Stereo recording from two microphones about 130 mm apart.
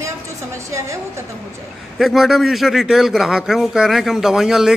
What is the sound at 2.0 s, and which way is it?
A man's voice, centre (ahead or behind).